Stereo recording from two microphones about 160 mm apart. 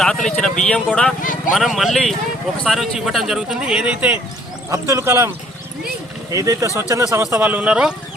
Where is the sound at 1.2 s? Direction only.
55° left (ahead or behind).